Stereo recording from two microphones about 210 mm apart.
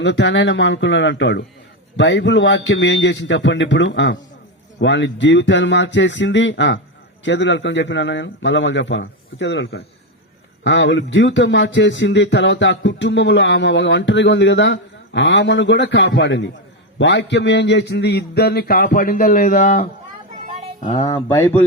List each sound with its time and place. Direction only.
0.0 s a man's voice: 55° left (ahead or behind); by 19.9 s 40° left (ahead or behind)
20.5 s a sound: 25° right (ahead or behind)
20.8 s speech: 25° left (ahead or behind)